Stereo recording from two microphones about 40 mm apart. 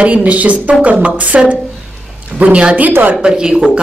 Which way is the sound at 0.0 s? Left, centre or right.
Right.